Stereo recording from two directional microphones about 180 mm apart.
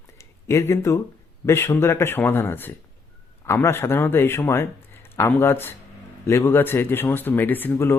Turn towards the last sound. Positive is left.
turn(degrees=10)  # may be behind; listen again after turning